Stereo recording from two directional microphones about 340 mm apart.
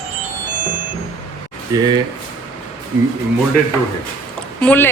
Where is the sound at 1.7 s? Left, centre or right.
Centre.